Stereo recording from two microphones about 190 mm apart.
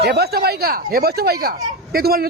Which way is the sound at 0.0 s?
55° right (ahead or behind).